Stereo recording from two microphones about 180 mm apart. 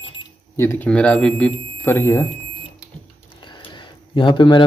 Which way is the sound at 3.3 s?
25° left (ahead or behind).